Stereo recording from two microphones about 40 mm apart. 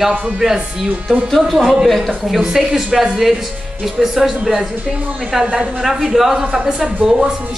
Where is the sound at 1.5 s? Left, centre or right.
Centre.